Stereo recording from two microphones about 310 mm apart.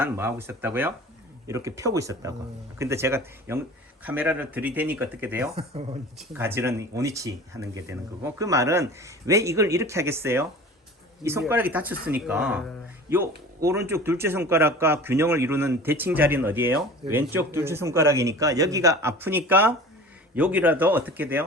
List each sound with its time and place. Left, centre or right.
0.0 s speech: centre
5.5 s speech: centre
6.1 s speech: centre